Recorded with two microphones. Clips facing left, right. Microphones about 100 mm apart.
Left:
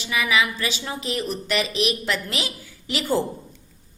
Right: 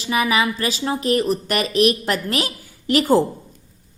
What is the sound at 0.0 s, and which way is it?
A woman's voice, 40° right (ahead or behind).